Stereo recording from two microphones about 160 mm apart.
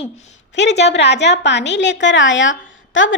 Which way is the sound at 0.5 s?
90° left.